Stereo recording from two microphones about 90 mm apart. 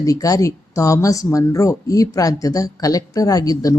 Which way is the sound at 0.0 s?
40° left (ahead or behind).